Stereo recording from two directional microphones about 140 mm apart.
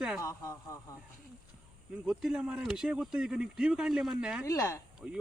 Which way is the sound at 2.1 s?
5° right (ahead or behind).